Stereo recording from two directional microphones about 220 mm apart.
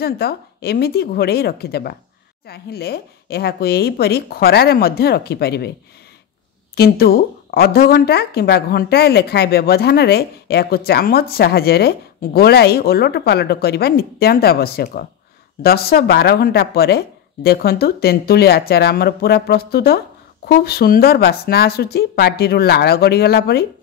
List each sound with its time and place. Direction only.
0.0 s speech: 45° left (ahead or behind)
6.7 s speech: 45° left (ahead or behind)